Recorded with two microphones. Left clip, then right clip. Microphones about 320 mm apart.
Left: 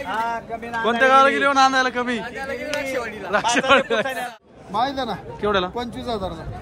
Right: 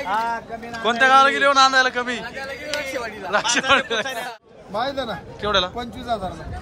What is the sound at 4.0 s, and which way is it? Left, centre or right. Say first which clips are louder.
Speech: left 2 dB; left.